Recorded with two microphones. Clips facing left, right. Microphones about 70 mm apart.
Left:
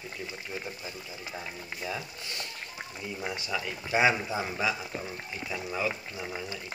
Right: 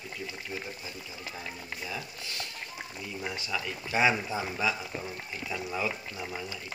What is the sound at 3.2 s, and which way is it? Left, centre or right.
Speech, centre.